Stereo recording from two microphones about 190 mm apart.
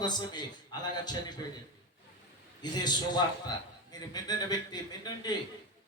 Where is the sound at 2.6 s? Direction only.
20° left (ahead or behind).